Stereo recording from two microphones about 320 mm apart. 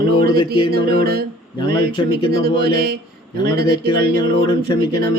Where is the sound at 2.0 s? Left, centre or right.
Centre.